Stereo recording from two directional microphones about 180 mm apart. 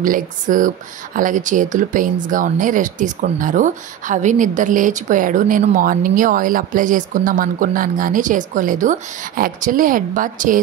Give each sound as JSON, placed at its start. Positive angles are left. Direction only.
{"t": 0.0, "sound": "speech", "side_deg": -50}